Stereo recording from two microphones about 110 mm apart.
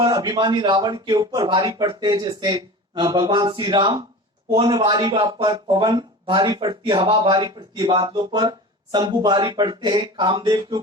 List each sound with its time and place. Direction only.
0.0 s speech: 40° right (ahead or behind)